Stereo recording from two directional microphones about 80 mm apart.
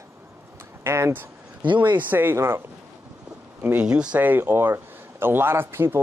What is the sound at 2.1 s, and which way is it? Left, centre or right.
Speech, right.